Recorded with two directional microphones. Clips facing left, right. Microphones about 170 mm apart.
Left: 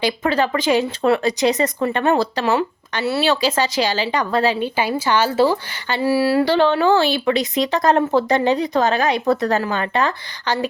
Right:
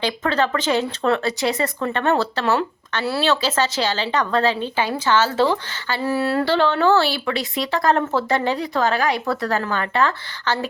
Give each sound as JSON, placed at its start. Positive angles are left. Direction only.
{"t": 0.0, "sound": "speech", "side_deg": 10}